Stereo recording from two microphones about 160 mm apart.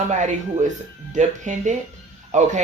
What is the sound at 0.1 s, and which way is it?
Speech, 50° right (ahead or behind).